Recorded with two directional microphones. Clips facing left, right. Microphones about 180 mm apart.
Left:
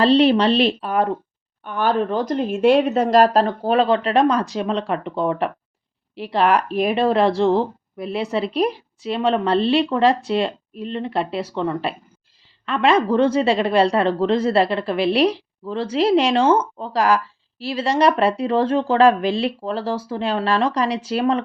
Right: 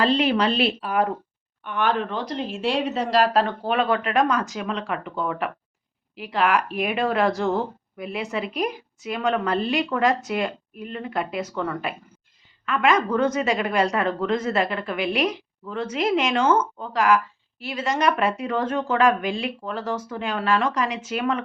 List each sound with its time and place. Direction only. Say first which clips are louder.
0.0 s speech: left 6 dB; 35° left (ahead or behind)